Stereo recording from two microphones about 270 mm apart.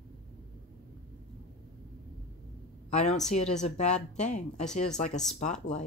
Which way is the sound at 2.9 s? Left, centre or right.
Left.